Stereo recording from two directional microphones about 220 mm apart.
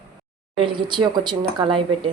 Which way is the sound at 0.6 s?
20° right (ahead or behind).